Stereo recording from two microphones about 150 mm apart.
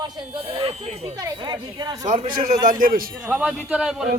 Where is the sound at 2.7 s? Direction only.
70° right (ahead or behind).